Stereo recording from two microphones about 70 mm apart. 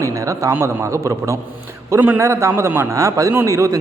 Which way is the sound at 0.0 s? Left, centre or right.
Right.